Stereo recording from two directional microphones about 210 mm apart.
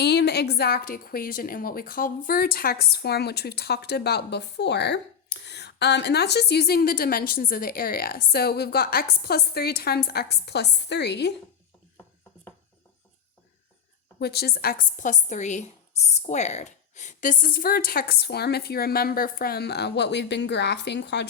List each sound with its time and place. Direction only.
0.0 s a woman's voice: 55° left (ahead or behind)
14.2 s a woman's voice: 50° left (ahead or behind)